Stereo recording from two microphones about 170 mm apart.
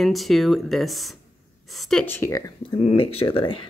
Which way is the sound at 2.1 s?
15° left (ahead or behind).